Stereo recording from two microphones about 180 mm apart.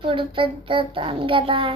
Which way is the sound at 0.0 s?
30° right (ahead or behind).